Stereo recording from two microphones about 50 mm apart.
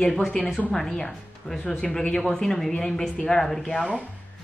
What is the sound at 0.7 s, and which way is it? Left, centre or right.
Speech, centre.